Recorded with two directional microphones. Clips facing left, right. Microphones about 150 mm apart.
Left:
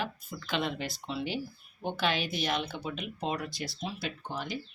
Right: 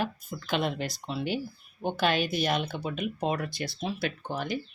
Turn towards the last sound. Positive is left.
turn(degrees=-55)  # may be behind; listen again after turning